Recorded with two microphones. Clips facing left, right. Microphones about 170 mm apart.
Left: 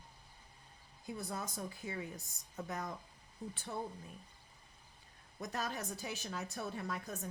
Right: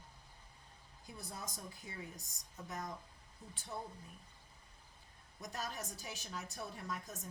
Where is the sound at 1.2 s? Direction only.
65° left (ahead or behind).